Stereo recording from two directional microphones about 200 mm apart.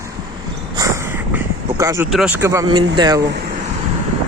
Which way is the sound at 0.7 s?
15° right (ahead or behind).